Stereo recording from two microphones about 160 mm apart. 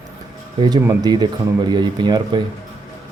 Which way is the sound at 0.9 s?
25° right (ahead or behind).